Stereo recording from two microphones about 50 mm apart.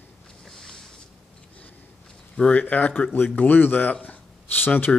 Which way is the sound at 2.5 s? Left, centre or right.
Left.